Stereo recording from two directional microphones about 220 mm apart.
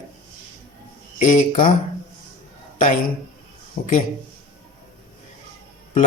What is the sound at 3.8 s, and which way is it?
Speech, 40° left (ahead or behind).